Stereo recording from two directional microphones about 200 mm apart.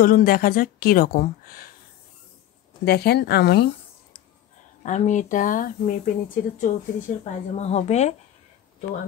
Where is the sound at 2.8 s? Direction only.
55° left (ahead or behind).